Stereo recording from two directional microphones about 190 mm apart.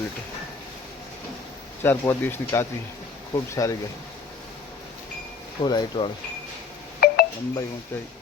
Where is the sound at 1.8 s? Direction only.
10° left (ahead or behind).